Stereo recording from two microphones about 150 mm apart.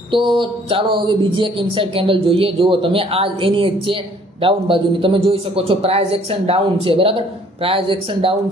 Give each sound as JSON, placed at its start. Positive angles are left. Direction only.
{"t": 0.1, "sound": "speech", "side_deg": -35}